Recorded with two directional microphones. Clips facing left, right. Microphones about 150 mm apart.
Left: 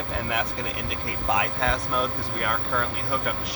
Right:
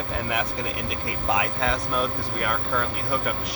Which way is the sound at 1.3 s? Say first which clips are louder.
Even; 5° right (ahead or behind).